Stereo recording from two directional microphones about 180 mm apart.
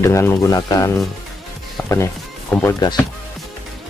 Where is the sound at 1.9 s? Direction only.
15° left (ahead or behind).